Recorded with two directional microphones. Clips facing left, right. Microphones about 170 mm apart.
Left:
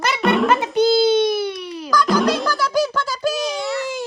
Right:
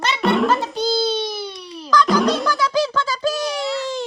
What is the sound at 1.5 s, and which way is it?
Music, centre (ahead or behind).